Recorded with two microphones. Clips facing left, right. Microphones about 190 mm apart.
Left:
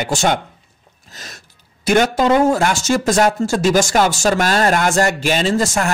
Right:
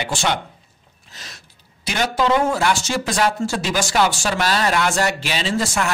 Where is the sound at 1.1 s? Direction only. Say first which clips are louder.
Left 4 dB; 45° left (ahead or behind).